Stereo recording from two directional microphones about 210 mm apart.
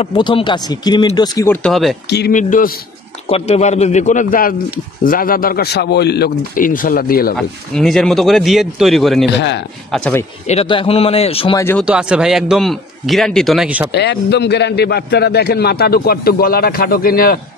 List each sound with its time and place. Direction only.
0.0 s speech: 20° left (ahead or behind); by 2.0 s centre (ahead or behind)
2.0 s a man's voice: 55° left (ahead or behind)
2.3 s a man's voice: 40° left (ahead or behind)
7.3 s a man's voice: 5° left (ahead or behind)
9.3 s a man's voice: 55° left (ahead or behind)
9.8 s a man's voice: 5° left (ahead or behind)
10.4 s speech: 30° left (ahead or behind)
11.5 s speech: 10° left (ahead or behind)
11.8 s a man's voice: 5° right (ahead or behind)
13.9 s a man's voice: 55° left (ahead or behind)